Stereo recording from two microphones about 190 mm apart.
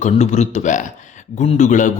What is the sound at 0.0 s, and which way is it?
A man's voice, 35° left (ahead or behind).